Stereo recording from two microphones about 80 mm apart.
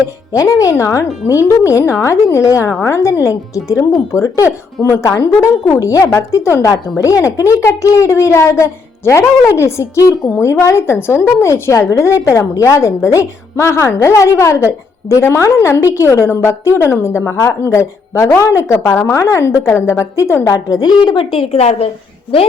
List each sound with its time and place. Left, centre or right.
0.3 s a woman's voice: left
21.0 s a woman's voice: left